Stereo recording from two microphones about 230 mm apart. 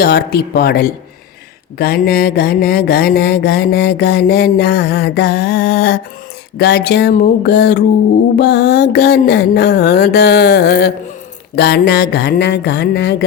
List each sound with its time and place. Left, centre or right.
0.0 s mantra: left